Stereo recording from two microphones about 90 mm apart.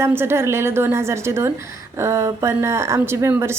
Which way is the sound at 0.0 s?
25° right (ahead or behind).